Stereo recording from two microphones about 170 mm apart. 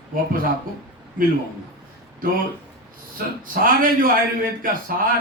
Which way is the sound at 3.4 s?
55° right (ahead or behind).